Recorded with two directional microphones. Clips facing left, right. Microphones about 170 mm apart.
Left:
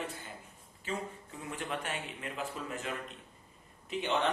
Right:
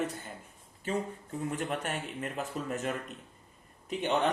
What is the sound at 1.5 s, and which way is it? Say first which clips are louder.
A man's voice: right 3 dB; 45° right (ahead or behind).